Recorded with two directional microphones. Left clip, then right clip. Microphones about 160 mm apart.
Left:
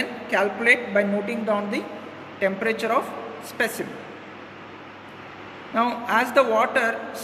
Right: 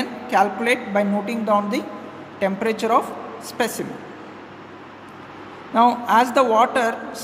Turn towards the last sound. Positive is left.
turn(degrees=-55)  # may be behind; listen again after turning